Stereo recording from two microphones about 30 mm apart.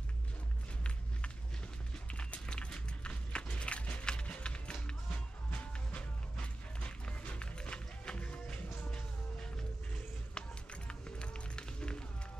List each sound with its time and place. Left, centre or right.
2.0 s a sound: left
4.0 s music: left
10.3 s run: left